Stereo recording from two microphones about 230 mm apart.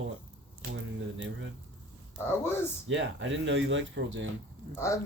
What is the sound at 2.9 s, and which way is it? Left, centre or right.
Speech, right.